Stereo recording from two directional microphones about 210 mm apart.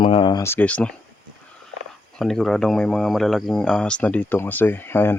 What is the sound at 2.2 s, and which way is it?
Speech, centre (ahead or behind).